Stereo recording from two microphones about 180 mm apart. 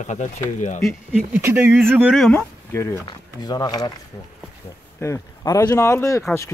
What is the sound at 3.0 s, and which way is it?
Speech, 20° left (ahead or behind).